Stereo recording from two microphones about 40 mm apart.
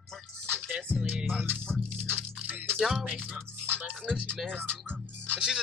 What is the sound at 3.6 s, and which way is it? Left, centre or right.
Music, right.